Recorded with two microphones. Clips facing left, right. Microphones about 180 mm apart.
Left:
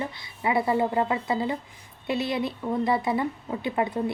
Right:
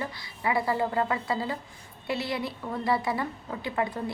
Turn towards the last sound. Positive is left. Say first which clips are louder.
# left 4 dB
turn(degrees=25)  # may be behind; listen again after turning